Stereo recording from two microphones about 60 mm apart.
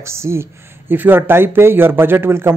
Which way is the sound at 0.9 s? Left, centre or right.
Right.